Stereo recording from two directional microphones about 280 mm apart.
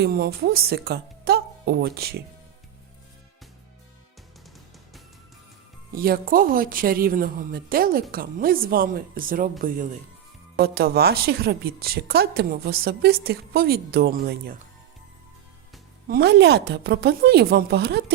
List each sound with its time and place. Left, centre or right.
0.0 s a woman's voice: right
5.9 s a woman's voice: right
16.0 s a woman's voice: right